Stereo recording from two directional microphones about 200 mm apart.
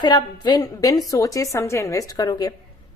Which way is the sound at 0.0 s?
20° left (ahead or behind).